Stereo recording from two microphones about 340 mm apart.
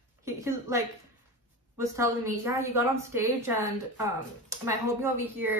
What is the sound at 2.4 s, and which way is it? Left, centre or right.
A woman's voice, centre.